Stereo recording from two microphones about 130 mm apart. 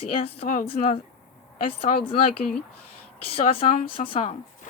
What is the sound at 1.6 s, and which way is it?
Speech, 45° left (ahead or behind).